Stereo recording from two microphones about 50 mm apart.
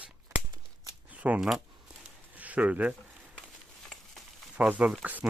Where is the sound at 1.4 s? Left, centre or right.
Centre.